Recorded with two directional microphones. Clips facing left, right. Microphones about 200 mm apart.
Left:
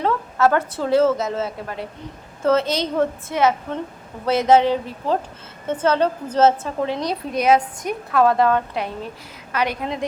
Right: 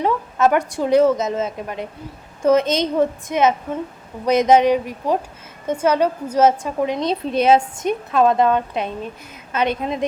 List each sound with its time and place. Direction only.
0.0 s a woman's voice: 15° right (ahead or behind)